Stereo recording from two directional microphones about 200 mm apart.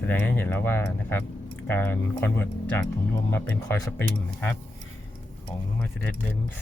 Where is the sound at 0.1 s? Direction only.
10° left (ahead or behind).